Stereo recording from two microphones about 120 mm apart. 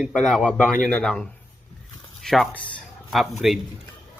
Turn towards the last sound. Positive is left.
turn(degrees=0)  # may be behind; listen again after turning